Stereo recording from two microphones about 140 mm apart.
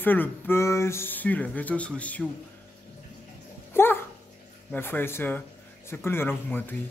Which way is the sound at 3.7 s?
15° left (ahead or behind).